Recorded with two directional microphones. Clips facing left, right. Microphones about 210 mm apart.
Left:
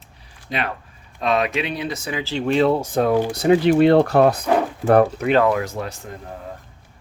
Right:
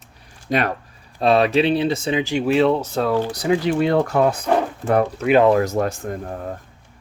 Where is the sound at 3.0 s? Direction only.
15° left (ahead or behind).